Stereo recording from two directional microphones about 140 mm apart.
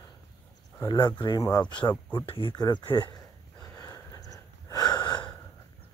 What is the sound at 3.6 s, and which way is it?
Gasp, 25° left (ahead or behind).